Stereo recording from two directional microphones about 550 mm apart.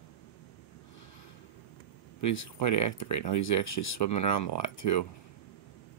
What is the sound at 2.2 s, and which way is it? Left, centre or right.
Speech, left.